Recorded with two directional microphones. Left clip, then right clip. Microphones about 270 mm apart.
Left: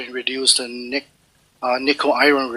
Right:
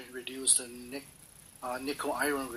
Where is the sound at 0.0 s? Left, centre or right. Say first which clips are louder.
Left 18 dB; left.